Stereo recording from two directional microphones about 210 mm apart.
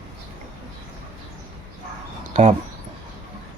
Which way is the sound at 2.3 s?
30° right (ahead or behind).